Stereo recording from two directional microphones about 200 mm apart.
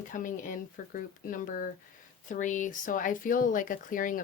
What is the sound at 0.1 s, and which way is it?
Speech, 40° left (ahead or behind).